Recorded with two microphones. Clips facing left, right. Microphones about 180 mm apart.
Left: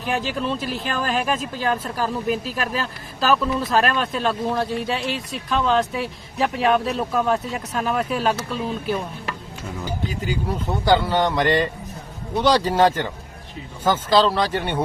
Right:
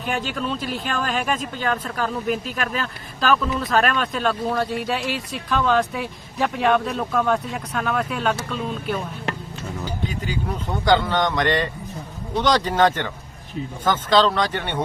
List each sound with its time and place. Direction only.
0.0 s speech: centre (ahead or behind)
2.4 s speech: 35° left (ahead or behind)
3.2 s speech: 5° left (ahead or behind)